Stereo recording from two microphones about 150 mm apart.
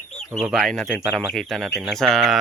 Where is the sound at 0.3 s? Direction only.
Centre (ahead or behind).